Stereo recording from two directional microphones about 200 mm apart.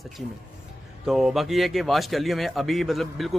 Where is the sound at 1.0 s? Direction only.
Centre (ahead or behind).